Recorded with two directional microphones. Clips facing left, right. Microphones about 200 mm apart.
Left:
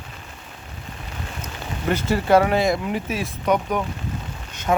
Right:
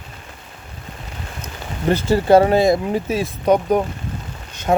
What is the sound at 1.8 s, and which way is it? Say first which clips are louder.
Speech: right 5 dB; 35° right (ahead or behind).